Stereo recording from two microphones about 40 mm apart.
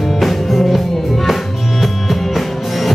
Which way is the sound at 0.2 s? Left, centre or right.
Centre.